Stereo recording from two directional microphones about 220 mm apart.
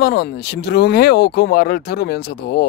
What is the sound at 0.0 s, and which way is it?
Speech, 45° left (ahead or behind).